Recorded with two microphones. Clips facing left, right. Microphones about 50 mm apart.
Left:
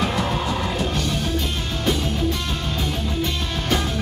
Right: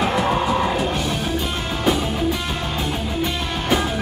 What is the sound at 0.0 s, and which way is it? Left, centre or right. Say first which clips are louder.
Music: right 4 dB; centre.